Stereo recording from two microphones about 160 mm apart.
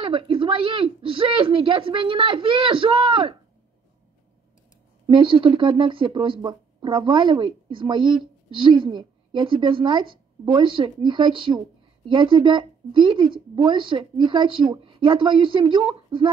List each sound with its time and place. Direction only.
0.0 s speech: 30° right (ahead or behind)
5.0 s speech: 30° right (ahead or behind)